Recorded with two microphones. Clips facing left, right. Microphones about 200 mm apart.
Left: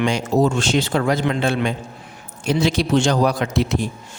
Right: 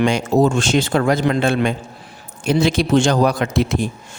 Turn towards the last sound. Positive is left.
turn(degrees=-55)  # may be behind; listen again after turning